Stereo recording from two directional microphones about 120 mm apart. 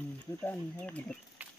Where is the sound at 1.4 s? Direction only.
15° right (ahead or behind).